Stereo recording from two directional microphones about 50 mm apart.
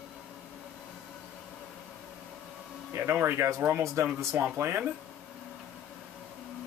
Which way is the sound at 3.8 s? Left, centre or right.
Right.